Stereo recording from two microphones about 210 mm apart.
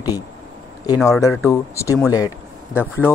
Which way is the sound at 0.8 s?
15° left (ahead or behind).